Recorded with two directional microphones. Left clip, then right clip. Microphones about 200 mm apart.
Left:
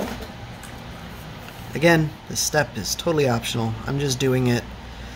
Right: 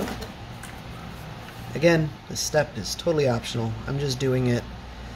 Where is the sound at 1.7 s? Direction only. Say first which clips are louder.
Left 3 dB; 20° left (ahead or behind).